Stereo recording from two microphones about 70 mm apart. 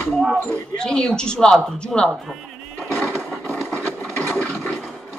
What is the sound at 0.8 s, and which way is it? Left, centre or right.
Speech, centre.